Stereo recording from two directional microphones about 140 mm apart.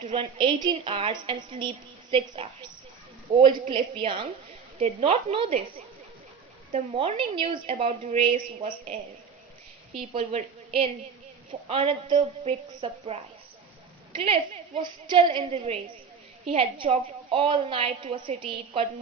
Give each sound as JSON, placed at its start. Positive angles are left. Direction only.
{"t": 0.1, "sound": "a woman's voice", "side_deg": -40}
{"t": 4.8, "sound": "a woman's voice", "side_deg": -50}
{"t": 6.7, "sound": "a woman's voice", "side_deg": -50}
{"t": 10.1, "sound": "a woman's voice", "side_deg": -50}
{"t": 14.2, "sound": "a woman's voice", "side_deg": -40}